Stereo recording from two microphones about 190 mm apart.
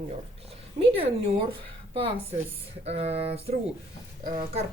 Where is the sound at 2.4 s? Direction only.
35° right (ahead or behind).